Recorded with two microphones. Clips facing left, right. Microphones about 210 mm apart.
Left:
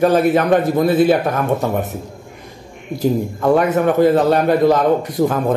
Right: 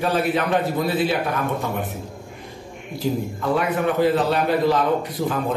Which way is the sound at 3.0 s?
45° left (ahead or behind).